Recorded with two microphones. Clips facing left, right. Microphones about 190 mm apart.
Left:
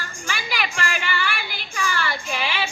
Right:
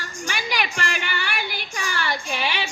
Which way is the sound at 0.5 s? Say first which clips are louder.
Left 1 dB; 45° right (ahead or behind).